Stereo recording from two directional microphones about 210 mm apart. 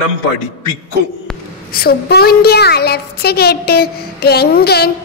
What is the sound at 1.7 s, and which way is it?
A woman's voice, 45° left (ahead or behind).